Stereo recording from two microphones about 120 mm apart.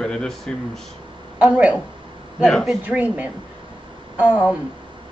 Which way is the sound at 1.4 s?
10° right (ahead or behind).